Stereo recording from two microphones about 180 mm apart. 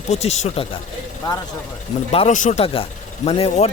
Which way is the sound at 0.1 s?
35° left (ahead or behind).